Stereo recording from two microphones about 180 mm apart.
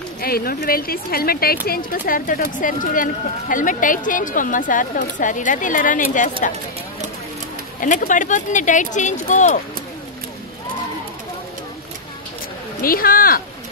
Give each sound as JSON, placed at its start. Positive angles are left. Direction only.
{"t": 0.2, "sound": "speech", "side_deg": 55}
{"t": 7.8, "sound": "speech", "side_deg": 45}
{"t": 12.8, "sound": "speech", "side_deg": 55}